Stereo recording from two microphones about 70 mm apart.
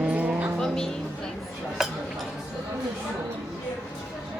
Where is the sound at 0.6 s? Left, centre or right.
Centre.